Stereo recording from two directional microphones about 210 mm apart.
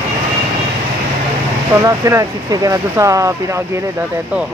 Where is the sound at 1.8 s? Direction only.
15° right (ahead or behind).